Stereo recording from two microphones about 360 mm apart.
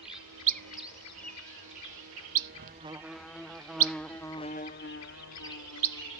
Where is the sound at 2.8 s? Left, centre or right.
Centre.